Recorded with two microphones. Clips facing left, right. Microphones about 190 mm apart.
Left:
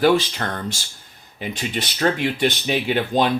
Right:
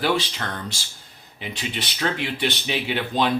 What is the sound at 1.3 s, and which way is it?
Speech, 45° left (ahead or behind).